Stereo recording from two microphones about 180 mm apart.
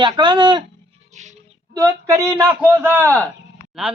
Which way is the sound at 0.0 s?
25° right (ahead or behind).